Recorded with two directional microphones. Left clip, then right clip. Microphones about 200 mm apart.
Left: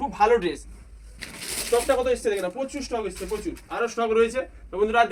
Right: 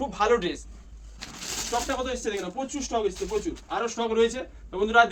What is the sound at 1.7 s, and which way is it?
Speech, 30° right (ahead or behind).